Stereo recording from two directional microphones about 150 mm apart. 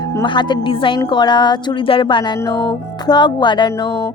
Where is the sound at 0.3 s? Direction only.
30° left (ahead or behind).